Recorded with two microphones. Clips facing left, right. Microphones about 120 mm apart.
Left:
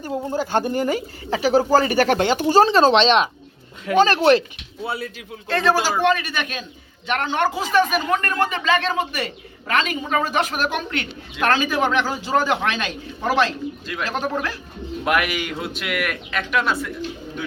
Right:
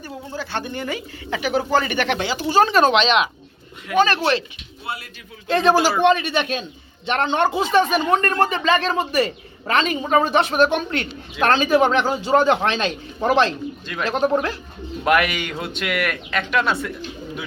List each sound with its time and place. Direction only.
0.3 s speech: 45° left (ahead or behind)
2.6 s speech: 30° left (ahead or behind)
5.5 s speech: 20° right (ahead or behind)
13.8 s speech: 5° left (ahead or behind)
14.2 s speech: 25° right (ahead or behind)
15.0 s speech: 5° left (ahead or behind)